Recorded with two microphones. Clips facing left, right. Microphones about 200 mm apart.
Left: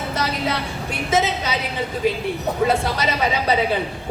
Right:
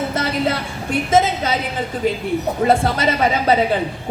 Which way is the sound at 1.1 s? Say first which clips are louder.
Right 4 dB; 50° right (ahead or behind).